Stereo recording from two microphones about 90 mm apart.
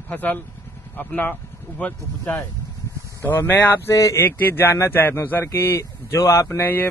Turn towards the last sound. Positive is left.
turn(degrees=25)  # may be behind; listen again after turning